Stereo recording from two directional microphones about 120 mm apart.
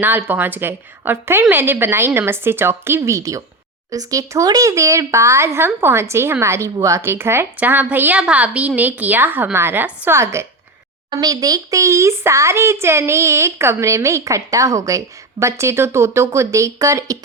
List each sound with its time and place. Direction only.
0.0 s a woman's voice: 15° right (ahead or behind)
11.1 s speech: 30° right (ahead or behind)